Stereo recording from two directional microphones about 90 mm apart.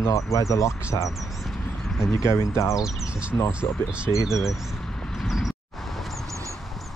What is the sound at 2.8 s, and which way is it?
Speech, 10° right (ahead or behind).